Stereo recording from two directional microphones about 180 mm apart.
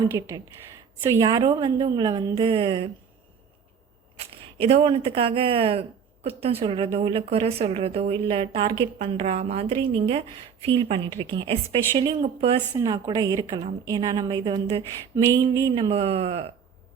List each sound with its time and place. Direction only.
0.1 s a woman's voice: 15° right (ahead or behind)
4.5 s a woman's voice: 30° right (ahead or behind)